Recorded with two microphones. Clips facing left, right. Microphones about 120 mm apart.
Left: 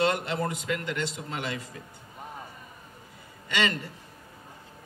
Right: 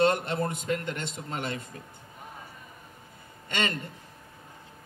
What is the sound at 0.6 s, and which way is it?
A man's voice, 45° right (ahead or behind).